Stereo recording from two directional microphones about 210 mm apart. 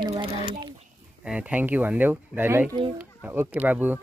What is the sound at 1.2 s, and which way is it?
Speech, 5° right (ahead or behind).